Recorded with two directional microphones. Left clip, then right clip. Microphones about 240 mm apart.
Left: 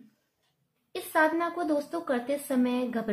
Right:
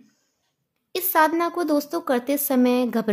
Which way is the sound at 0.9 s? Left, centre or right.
Right.